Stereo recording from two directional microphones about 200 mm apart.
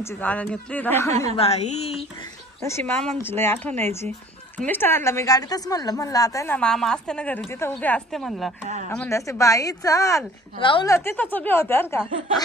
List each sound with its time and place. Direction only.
0.0 s a woman's voice: 10° left (ahead or behind)
1.3 s a woman's voice: 30° left (ahead or behind)
2.6 s a woman's voice: 10° left (ahead or behind)
10.9 s a woman's voice: 10° left (ahead or behind)